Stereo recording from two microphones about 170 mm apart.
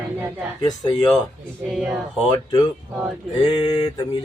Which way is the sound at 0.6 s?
25° left (ahead or behind).